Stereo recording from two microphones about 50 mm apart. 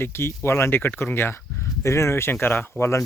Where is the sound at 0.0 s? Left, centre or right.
Left.